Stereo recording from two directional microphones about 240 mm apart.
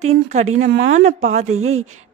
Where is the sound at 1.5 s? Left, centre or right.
Right.